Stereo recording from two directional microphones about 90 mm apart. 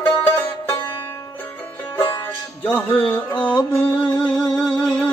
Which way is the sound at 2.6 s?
20° left (ahead or behind).